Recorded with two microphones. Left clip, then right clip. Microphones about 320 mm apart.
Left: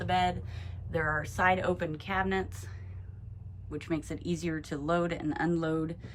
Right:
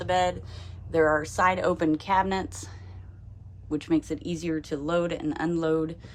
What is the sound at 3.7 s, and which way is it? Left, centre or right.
A woman's voice, centre.